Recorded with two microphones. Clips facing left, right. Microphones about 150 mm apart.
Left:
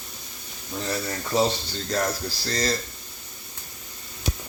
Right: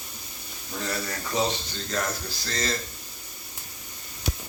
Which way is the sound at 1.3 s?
35° left (ahead or behind).